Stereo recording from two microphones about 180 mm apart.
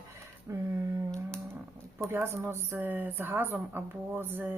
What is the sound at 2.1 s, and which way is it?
A woman's voice, 15° right (ahead or behind).